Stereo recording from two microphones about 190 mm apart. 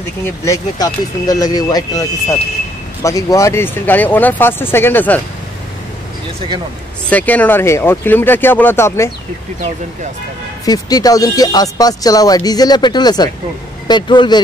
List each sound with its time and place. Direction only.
0.5 s speech: 20° left (ahead or behind)
7.1 s speech: 10° left (ahead or behind)
10.6 s speech: 20° left (ahead or behind)